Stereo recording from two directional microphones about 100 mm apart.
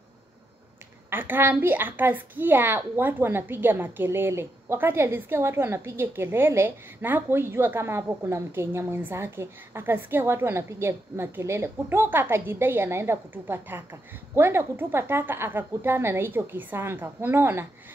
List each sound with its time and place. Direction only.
1.1 s a woman's voice: 20° right (ahead or behind)